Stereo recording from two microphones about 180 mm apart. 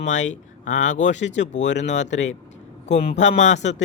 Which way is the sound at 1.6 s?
85° left.